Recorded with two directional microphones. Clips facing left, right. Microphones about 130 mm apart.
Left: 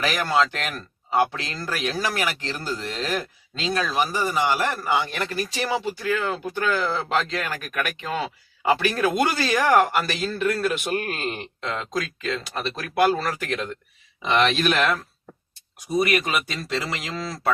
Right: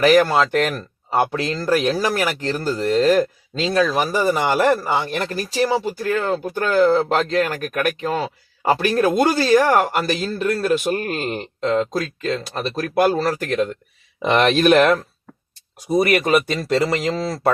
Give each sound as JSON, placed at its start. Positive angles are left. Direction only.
{"t": 0.0, "sound": "speech", "side_deg": -45}
{"t": 4.8, "sound": "speech", "side_deg": -35}
{"t": 14.2, "sound": "speech", "side_deg": -50}